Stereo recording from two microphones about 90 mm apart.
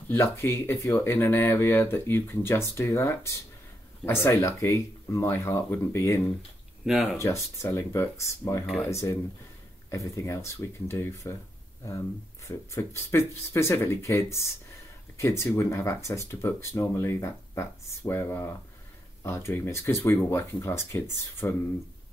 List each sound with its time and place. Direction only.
0.1 s speech: 30° left (ahead or behind)
6.9 s speech: 5° right (ahead or behind)
7.6 s speech: 30° left (ahead or behind)
12.4 s speech: 30° left (ahead or behind)